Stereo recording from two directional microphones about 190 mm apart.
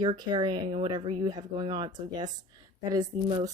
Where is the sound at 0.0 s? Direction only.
25° right (ahead or behind).